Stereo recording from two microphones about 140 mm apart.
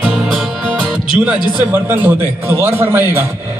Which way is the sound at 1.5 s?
15° right (ahead or behind).